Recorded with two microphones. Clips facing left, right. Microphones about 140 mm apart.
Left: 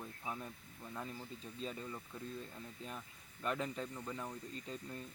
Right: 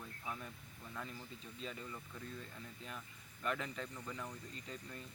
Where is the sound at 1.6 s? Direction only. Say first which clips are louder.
Left 3 dB; 35° left (ahead or behind).